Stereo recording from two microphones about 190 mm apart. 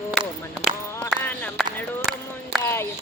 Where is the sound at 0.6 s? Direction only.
60° right (ahead or behind).